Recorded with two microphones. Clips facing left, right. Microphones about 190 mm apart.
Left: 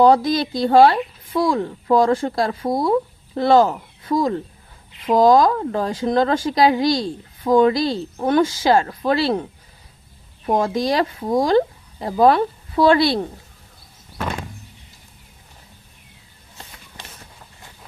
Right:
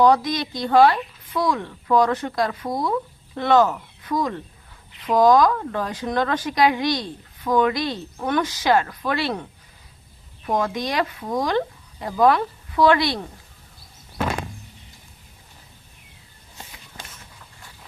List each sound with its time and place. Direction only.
0.0 s speech: 30° left (ahead or behind)